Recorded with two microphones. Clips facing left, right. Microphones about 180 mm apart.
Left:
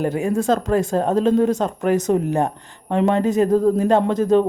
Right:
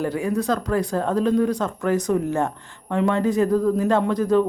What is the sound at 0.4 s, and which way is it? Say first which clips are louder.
Speech: left 4 dB; 25° left (ahead or behind).